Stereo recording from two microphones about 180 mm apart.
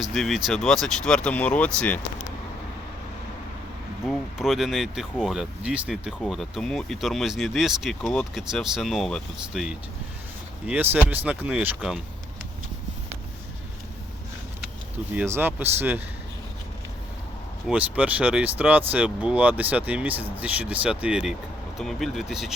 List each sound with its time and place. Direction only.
0.0 s speech: centre (ahead or behind)
4.0 s speech: centre (ahead or behind)
15.1 s speech: 10° right (ahead or behind)
17.7 s speech: 10° right (ahead or behind)